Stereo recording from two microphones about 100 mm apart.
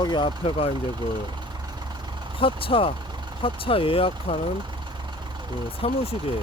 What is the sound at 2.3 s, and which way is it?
Speech, 60° left (ahead or behind).